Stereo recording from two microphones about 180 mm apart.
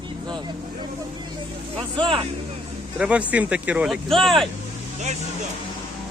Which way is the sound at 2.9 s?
5° right (ahead or behind).